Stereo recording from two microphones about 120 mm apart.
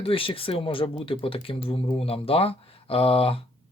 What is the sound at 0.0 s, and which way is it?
Speech, 50° left (ahead or behind).